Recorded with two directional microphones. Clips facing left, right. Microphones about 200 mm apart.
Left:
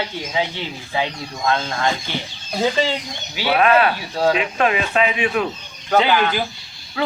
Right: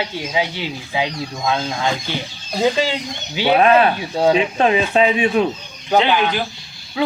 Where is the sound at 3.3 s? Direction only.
20° right (ahead or behind).